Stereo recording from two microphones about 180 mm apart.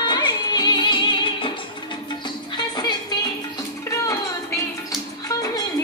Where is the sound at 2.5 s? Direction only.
25° left (ahead or behind).